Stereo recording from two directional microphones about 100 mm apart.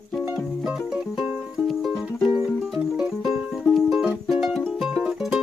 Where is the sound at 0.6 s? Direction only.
5° right (ahead or behind).